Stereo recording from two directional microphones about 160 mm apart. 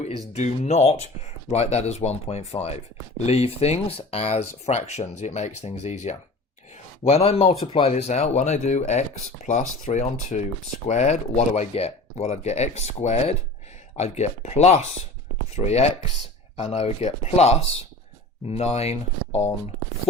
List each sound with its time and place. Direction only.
0.3 s speech: 45° left (ahead or behind)